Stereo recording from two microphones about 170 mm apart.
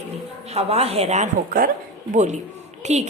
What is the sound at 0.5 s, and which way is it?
A woman's voice, 35° right (ahead or behind).